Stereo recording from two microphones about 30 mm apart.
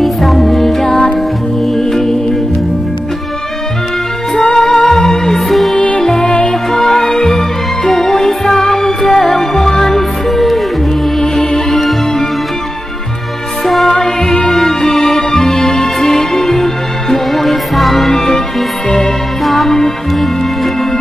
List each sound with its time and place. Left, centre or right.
0.0 s music: centre
4.6 s music: centre
5.8 s music: left
6.0 s music: centre
13.7 s music: centre
18.1 s music: centre
19.4 s music: centre